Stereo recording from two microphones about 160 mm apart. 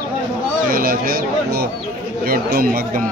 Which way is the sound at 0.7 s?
65° right (ahead or behind).